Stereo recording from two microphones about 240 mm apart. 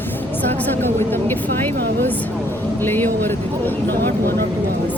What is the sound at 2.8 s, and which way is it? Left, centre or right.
Speech, centre.